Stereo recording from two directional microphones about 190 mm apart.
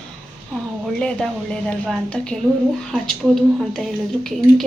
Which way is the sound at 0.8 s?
5° left (ahead or behind).